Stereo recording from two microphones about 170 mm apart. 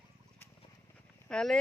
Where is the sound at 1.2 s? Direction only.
5° left (ahead or behind).